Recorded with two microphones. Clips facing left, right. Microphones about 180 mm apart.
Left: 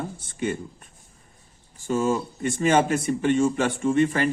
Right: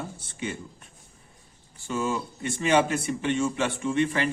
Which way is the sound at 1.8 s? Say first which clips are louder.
Left 5 dB; 45° left (ahead or behind).